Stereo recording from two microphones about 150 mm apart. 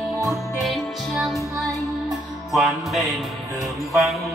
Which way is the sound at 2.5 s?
Centre (ahead or behind).